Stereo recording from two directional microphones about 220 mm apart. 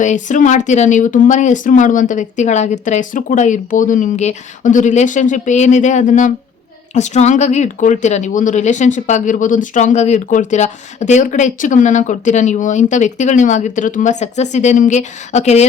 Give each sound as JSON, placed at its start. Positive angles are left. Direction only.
{"t": 0.0, "sound": "speech", "side_deg": 35}